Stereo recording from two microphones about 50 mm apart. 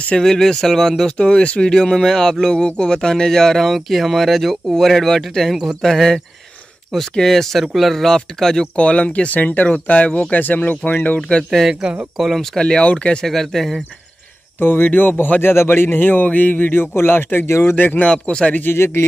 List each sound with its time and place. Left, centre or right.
0.2 s speech: centre
1.1 s speech: left
8.7 s a man's voice: left
11.1 s speech: left
13.3 s speech: centre
14.6 s a man's voice: left
15.4 s a man's voice: left
18.0 s speech: centre
18.7 s speech: left